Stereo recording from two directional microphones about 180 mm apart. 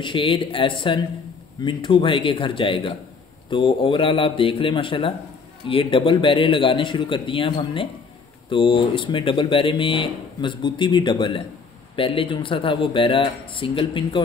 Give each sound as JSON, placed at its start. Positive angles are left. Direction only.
{"t": 0.0, "sound": "speech", "side_deg": 30}